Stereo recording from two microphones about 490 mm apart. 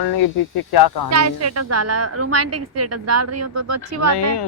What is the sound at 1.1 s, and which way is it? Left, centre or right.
A woman's voice, right.